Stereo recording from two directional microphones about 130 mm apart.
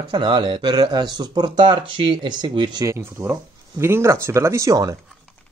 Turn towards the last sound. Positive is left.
turn(degrees=-25)  # may be behind; listen again after turning